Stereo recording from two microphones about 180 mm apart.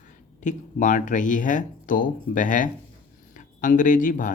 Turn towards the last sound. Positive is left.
turn(degrees=50)  # may be behind; listen again after turning